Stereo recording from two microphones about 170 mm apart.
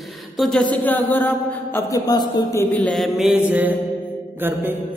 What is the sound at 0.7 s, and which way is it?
Speech, 10° left (ahead or behind).